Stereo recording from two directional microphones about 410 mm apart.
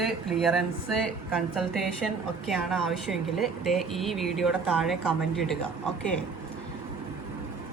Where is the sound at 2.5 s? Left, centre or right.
Centre.